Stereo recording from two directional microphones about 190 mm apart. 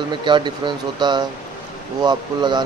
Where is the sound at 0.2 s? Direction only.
25° right (ahead or behind).